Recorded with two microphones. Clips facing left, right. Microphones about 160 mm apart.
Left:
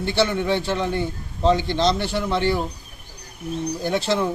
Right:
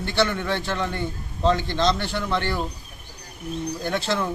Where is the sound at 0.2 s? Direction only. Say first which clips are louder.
Left 2 dB; 20° left (ahead or behind).